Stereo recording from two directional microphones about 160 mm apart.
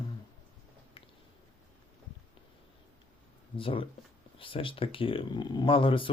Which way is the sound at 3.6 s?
35° left (ahead or behind).